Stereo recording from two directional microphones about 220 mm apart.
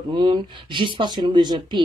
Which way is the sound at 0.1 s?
20° right (ahead or behind).